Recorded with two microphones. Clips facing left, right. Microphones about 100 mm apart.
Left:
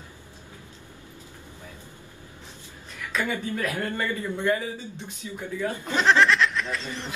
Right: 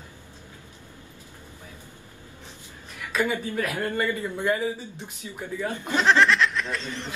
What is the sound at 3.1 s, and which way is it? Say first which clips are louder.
Speech: right 2 dB; 15° right (ahead or behind).